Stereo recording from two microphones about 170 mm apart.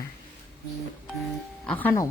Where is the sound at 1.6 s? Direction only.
10° left (ahead or behind).